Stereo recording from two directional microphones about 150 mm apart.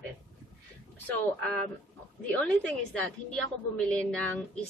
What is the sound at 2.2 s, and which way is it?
A woman's voice, 10° left (ahead or behind).